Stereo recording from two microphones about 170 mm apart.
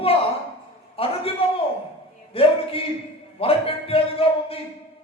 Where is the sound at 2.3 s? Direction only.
35° left (ahead or behind).